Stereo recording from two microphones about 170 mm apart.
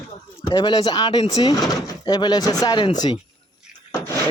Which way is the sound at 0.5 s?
25° left (ahead or behind).